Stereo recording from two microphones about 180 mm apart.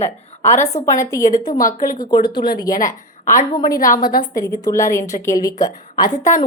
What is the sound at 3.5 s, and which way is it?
A woman's voice, 25° left (ahead or behind).